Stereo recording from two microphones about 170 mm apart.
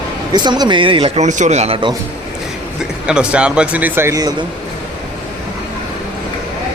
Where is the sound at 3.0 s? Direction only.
5° right (ahead or behind).